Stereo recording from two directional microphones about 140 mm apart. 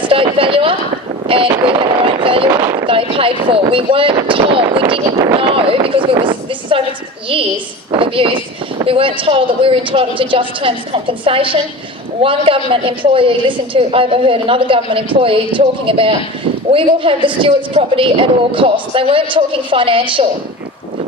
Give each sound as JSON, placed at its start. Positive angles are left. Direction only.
{"t": 0.0, "sound": "speech", "side_deg": -40}
{"t": 1.3, "sound": "a sound", "side_deg": -40}
{"t": 2.5, "sound": "speech", "side_deg": -20}
{"t": 2.7, "sound": "a woman's voice", "side_deg": -40}
{"t": 7.9, "sound": "a woman's voice", "side_deg": -40}